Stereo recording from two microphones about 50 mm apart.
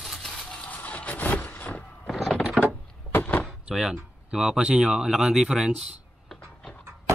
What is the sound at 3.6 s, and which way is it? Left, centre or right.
Speech, centre.